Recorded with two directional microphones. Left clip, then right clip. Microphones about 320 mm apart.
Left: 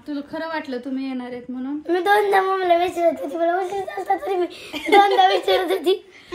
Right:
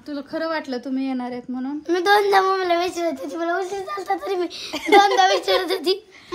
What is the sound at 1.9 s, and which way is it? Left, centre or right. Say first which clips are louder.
A woman's voice: even; centre.